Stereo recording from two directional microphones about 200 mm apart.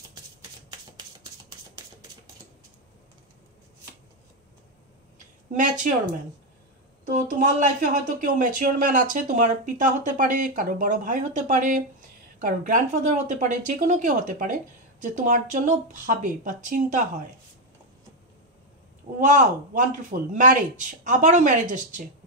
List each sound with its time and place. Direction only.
7.2 s a woman's voice: 40° right (ahead or behind)
19.1 s a woman's voice: 40° right (ahead or behind)